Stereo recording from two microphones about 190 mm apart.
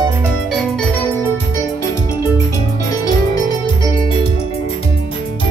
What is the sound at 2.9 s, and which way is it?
Music, 20° left (ahead or behind).